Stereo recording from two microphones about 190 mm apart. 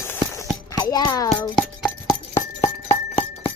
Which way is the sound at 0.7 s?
20° left (ahead or behind).